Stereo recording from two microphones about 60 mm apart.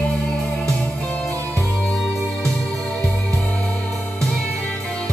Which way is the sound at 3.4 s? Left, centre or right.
Left.